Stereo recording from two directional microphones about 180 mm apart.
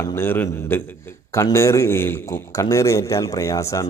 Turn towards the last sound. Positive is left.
turn(degrees=15)  # may be behind; listen again after turning